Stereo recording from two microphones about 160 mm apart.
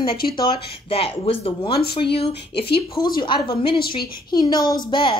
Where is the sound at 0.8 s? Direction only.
35° left (ahead or behind).